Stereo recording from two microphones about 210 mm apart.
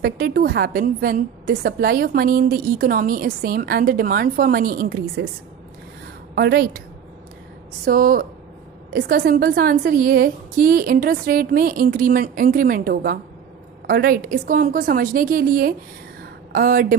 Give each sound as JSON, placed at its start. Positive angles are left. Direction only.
{"t": 0.0, "sound": "a woman's voice", "side_deg": -45}
{"t": 6.3, "sound": "a woman's voice", "side_deg": -50}
{"t": 7.9, "sound": "a woman's voice", "side_deg": -40}